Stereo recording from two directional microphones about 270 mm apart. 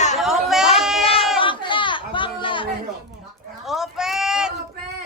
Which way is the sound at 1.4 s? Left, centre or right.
Centre.